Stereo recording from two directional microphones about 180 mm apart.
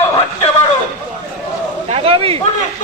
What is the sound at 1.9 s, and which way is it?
Speech, 30° right (ahead or behind).